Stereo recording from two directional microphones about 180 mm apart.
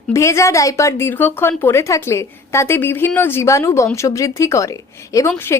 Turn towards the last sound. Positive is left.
turn(degrees=15)  # may be behind; listen again after turning